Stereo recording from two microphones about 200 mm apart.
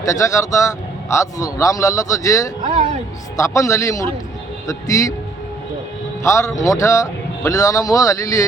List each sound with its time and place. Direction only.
0.0 s speech: 15° left (ahead or behind)
6.2 s speech: 15° left (ahead or behind)